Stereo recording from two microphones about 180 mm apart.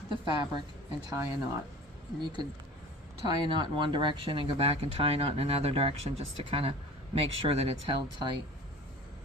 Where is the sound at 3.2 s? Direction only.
25° right (ahead or behind).